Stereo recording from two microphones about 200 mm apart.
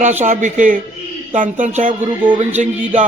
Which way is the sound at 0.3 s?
40° right (ahead or behind).